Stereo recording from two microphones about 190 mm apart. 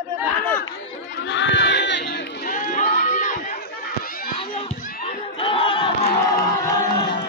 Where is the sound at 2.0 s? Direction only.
50° left (ahead or behind).